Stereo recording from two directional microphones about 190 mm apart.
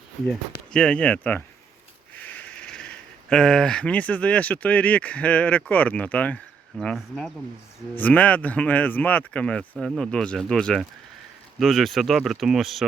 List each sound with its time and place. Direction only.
0.3 s speech: 5° left (ahead or behind)